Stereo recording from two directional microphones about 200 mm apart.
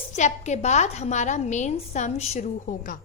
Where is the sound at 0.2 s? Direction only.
35° left (ahead or behind).